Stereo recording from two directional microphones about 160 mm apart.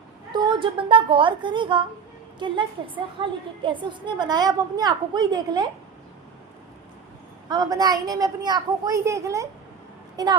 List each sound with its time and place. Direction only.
0.3 s a woman's voice: 30° right (ahead or behind)
7.5 s a woman's voice: 25° right (ahead or behind)